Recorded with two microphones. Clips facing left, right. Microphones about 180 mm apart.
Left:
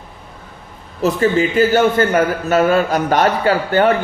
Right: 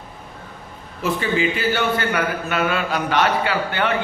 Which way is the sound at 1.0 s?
40° left (ahead or behind).